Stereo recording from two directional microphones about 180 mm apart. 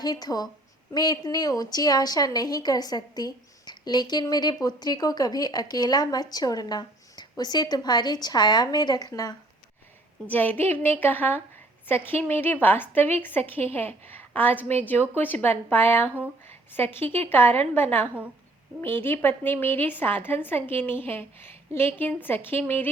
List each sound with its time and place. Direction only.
0.0 s a woman's voice: 20° left (ahead or behind)
10.2 s a woman's voice: 10° left (ahead or behind)
16.5 s a sound: 10° left (ahead or behind)
17.2 s a woman's voice: 10° left (ahead or behind)